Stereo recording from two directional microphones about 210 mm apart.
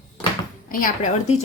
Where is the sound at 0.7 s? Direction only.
40° left (ahead or behind).